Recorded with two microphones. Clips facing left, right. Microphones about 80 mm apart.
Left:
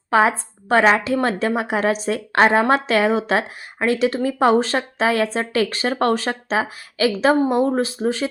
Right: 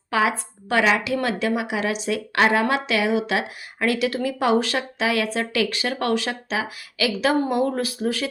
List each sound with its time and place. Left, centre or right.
0.1 s speech: left